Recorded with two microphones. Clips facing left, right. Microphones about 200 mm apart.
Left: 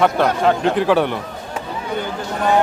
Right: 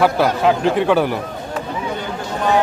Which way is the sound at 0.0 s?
5° right (ahead or behind).